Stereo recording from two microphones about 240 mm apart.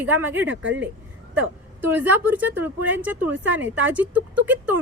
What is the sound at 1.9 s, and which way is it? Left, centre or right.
Speech, centre.